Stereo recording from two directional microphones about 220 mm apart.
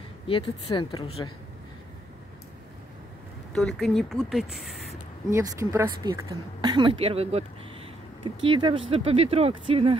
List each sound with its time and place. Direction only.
0.3 s a woman's voice: 25° left (ahead or behind)
3.5 s speech: centre (ahead or behind)
5.3 s speech: 15° right (ahead or behind)